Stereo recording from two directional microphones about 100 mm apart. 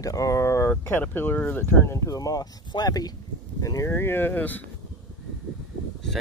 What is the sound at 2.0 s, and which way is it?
Speech, 35° left (ahead or behind).